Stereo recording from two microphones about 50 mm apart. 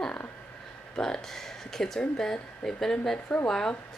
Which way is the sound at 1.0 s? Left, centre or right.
Centre.